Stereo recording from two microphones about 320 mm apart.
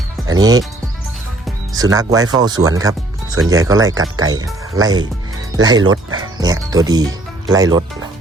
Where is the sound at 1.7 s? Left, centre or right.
Centre.